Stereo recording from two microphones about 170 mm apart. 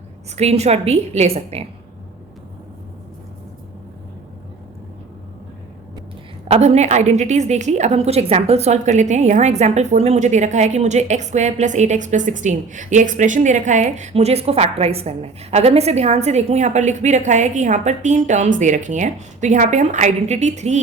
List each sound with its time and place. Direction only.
0.3 s a woman's voice: 40° right (ahead or behind)
6.5 s a woman's voice: 40° right (ahead or behind)